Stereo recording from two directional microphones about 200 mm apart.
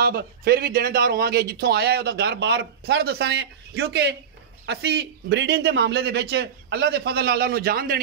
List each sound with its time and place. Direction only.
0.0 s a man's voice: 50° right (ahead or behind)